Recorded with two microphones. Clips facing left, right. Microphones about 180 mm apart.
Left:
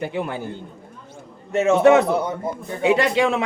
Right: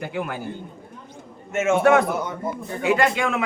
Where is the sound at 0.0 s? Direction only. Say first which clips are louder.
Left 3 dB; 25° left (ahead or behind).